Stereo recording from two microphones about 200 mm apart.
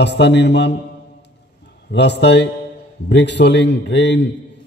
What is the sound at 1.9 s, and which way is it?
A man's voice, 60° left (ahead or behind).